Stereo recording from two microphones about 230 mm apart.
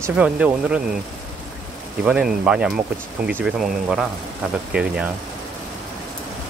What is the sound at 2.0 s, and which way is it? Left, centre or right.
Speech, centre.